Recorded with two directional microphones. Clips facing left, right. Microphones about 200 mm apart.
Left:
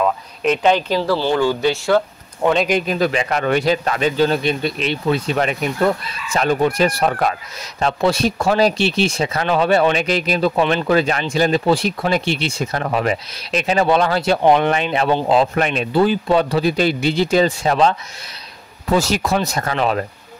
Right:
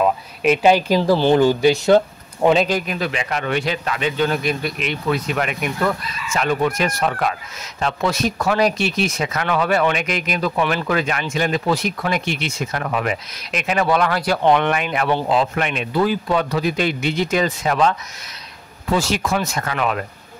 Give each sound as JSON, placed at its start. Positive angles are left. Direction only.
{"t": 0.0, "sound": "speech", "side_deg": -10}
{"t": 2.9, "sound": "speech", "side_deg": 35}
{"t": 15.3, "sound": "speech", "side_deg": 35}
{"t": 18.9, "sound": "speech", "side_deg": 40}